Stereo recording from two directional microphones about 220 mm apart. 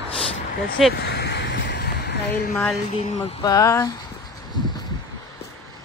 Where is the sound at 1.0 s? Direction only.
50° left (ahead or behind).